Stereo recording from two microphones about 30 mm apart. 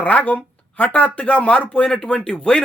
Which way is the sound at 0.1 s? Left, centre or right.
Left.